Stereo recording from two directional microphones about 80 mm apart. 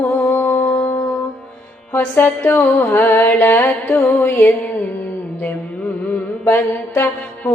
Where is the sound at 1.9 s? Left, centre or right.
Left.